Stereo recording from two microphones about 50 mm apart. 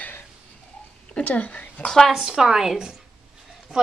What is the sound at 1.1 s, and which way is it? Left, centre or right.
Speech, left.